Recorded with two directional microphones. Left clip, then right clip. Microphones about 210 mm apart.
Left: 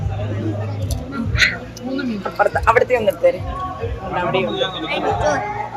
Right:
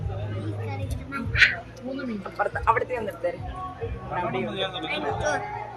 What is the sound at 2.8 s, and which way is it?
Speech, 30° left (ahead or behind).